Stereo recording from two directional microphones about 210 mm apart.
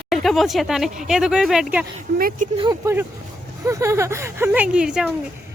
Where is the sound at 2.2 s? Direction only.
45° right (ahead or behind).